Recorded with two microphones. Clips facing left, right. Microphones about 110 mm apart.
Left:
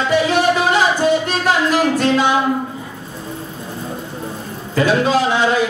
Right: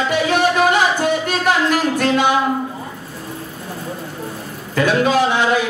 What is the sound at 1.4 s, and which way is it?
Music, 55° right (ahead or behind).